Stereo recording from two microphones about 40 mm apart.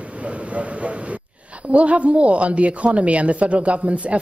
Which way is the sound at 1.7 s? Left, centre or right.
Right.